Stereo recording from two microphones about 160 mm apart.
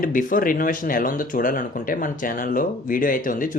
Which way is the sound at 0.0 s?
60° left (ahead or behind).